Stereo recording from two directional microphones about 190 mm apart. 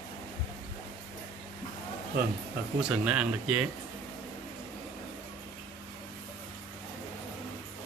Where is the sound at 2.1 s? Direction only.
55° right (ahead or behind).